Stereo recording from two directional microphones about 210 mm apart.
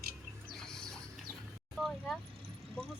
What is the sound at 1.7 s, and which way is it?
Vehicle, centre (ahead or behind).